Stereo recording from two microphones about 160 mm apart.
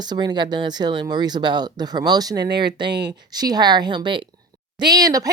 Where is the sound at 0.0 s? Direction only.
25° right (ahead or behind).